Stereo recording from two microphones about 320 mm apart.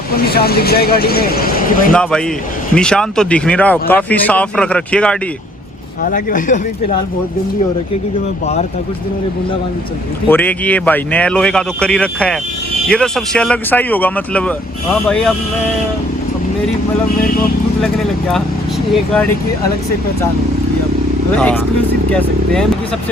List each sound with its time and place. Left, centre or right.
0.1 s speech: left
1.9 s speech: centre
6.0 s speech: left
10.2 s speech: centre
17.8 s speech: centre
21.3 s speech: centre